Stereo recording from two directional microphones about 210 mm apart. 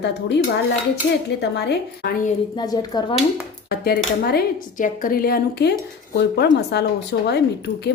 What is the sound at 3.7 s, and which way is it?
Speech, 45° left (ahead or behind).